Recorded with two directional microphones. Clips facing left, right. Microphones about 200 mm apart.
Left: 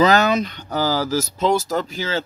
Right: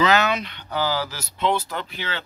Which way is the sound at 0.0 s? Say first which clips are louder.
Left 4 dB; 40° left (ahead or behind).